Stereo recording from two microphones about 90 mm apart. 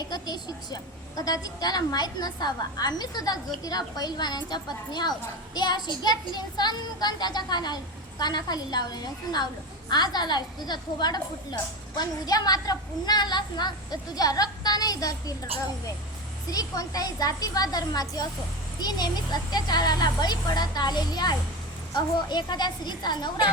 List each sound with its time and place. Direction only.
0.0 s a woman's voice: 50° left (ahead or behind)
16.5 s a woman's voice: 40° left (ahead or behind)